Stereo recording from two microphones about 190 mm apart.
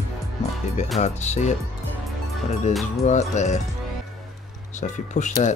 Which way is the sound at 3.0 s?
35° left (ahead or behind).